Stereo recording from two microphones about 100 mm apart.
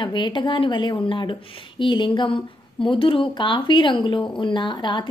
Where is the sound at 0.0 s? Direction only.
55° left (ahead or behind).